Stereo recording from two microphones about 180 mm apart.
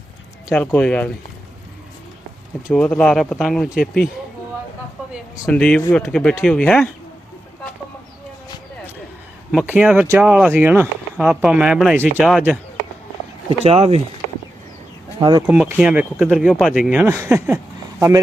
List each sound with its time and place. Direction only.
0.5 s speech: 5° left (ahead or behind)
2.7 s speech: 5° left (ahead or behind)
5.5 s speech: 5° left (ahead or behind)
9.6 s speech: 5° right (ahead or behind)
13.5 s speech: 35° right (ahead or behind)
15.2 s speech: 25° right (ahead or behind)
15.4 s speech: 5° right (ahead or behind)